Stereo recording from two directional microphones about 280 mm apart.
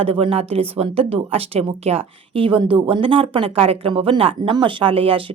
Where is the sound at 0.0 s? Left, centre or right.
Centre.